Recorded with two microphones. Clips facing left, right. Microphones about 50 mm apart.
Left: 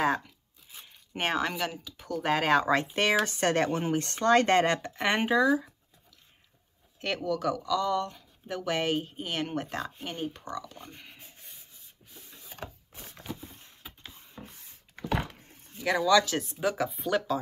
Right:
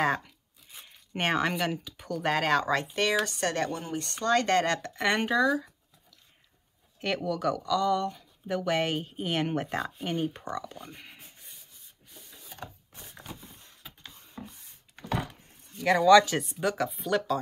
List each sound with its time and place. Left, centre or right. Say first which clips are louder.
0.0 s speech: even; centre
7.0 s speech: right 1 dB; centre
10.3 s speech: right 2 dB; right
10.8 s speech: right 2 dB; centre
12.1 s a sound: even; centre
13.8 s printer: left 1 dB; centre
15.8 s speech: right 5 dB; centre
16.5 s speech: left 1 dB; centre